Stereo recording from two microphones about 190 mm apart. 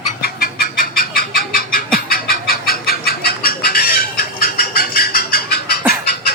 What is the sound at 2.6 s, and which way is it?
Chicken, 50° left (ahead or behind).